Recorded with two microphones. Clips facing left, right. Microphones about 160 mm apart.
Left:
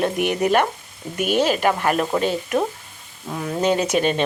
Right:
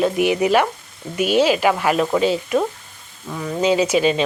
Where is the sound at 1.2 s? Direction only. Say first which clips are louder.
Right 3 dB; 50° left (ahead or behind).